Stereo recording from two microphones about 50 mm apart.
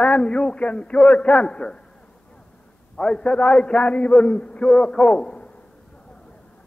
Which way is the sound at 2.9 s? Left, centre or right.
Centre.